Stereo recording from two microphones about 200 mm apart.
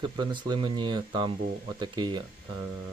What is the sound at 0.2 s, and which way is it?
Speech, 25° right (ahead or behind).